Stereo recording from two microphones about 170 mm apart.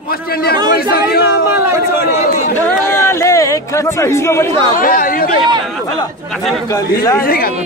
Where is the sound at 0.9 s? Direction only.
65° left (ahead or behind).